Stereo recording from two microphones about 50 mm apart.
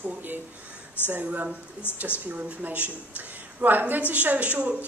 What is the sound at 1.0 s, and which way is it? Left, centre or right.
A woman's voice, right.